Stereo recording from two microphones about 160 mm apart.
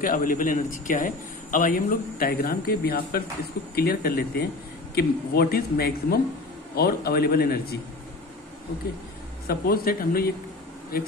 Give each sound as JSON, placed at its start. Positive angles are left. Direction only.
{"t": 0.0, "sound": "speech", "side_deg": 60}
{"t": 9.5, "sound": "speech", "side_deg": 70}